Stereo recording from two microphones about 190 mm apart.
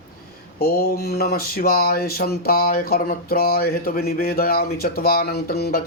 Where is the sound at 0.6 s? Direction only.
55° left (ahead or behind).